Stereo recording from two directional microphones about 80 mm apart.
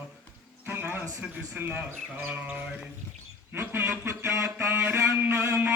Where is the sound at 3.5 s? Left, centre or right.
Right.